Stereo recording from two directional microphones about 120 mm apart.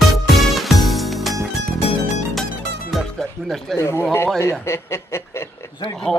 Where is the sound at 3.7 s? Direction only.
20° left (ahead or behind).